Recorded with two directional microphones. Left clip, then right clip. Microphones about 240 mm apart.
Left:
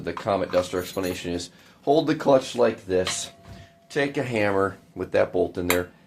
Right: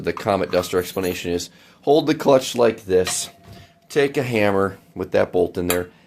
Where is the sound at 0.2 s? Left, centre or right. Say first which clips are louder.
Right 2 dB; right.